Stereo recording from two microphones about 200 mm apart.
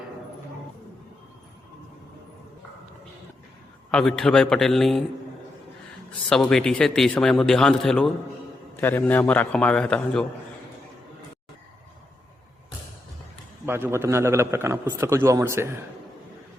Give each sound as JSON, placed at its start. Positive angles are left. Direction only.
{"t": 3.9, "sound": "speech", "side_deg": 0}
{"t": 6.1, "sound": "a man's voice", "side_deg": 5}
{"t": 13.7, "sound": "a man's voice", "side_deg": -10}